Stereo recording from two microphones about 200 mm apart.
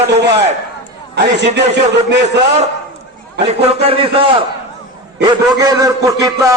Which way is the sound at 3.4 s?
30° right (ahead or behind).